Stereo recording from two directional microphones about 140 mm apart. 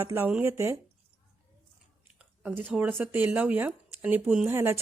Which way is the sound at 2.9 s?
15° right (ahead or behind).